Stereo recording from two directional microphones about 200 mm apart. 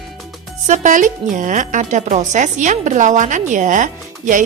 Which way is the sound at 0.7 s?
40° right (ahead or behind).